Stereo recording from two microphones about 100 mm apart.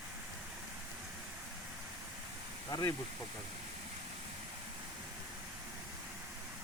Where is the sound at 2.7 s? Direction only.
40° left (ahead or behind).